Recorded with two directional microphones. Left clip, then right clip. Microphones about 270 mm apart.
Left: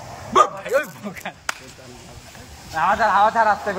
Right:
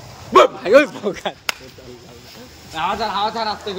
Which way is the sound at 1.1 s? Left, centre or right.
Right.